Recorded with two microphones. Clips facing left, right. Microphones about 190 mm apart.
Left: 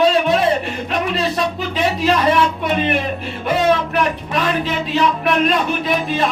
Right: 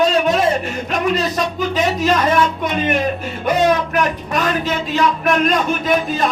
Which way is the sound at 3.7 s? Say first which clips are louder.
Even; 45° right (ahead or behind).